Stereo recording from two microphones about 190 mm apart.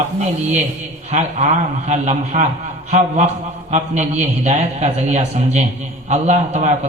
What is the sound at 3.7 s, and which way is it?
A man's voice, 35° right (ahead or behind).